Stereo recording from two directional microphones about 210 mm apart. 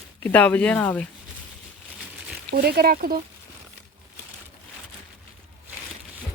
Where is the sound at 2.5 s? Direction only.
45° right (ahead or behind).